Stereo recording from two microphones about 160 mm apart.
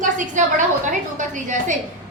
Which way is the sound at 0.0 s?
50° right (ahead or behind).